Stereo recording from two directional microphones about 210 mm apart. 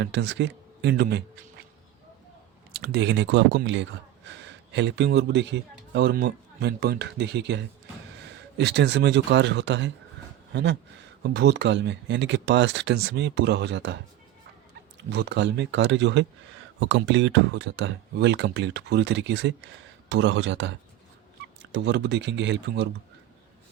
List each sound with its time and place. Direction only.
0.0 s speech: 55° right (ahead or behind)
2.7 s speech: 50° right (ahead or behind)
15.1 s speech: 55° right (ahead or behind)